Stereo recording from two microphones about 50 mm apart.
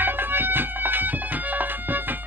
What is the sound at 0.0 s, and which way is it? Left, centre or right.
Music, right.